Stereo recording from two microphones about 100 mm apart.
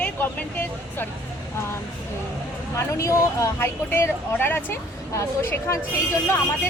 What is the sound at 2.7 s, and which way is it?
Speech, 30° left (ahead or behind).